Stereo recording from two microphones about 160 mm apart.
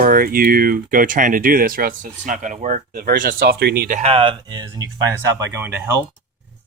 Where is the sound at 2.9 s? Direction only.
65° right (ahead or behind); by 3.9 s 80° right.